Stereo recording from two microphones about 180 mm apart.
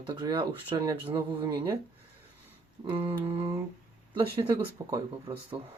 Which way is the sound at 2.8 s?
30° right (ahead or behind).